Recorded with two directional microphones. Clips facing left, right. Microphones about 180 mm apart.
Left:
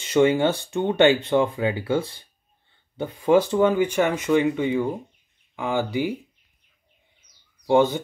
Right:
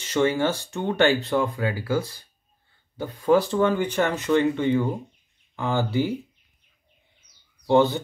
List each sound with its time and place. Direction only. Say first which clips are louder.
0.2 s speech: left 3 dB; 15° left (ahead or behind)
7.6 s speech: even; 10° left (ahead or behind)